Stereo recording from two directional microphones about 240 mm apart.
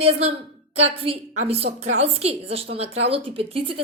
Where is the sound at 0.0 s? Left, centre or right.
Right.